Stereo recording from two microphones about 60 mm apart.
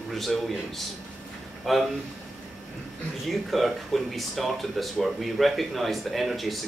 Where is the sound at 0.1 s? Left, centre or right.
Centre.